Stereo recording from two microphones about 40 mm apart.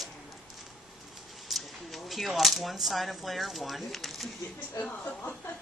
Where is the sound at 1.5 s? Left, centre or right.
Centre.